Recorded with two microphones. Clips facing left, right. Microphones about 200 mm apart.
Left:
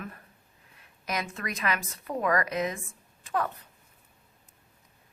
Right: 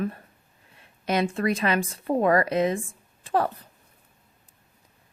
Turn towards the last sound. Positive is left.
turn(degrees=-30)  # may be behind; listen again after turning